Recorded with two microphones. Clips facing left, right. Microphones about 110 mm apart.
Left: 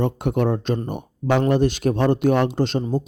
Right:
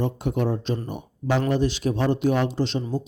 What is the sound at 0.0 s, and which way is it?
Speech, 60° left (ahead or behind).